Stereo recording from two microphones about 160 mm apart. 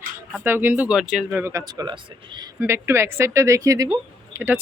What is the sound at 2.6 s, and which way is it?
Speech, 15° right (ahead or behind).